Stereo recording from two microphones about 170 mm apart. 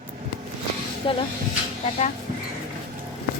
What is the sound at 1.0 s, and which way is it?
Speech, 30° left (ahead or behind).